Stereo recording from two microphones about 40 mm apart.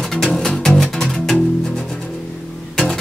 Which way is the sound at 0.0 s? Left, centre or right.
Centre.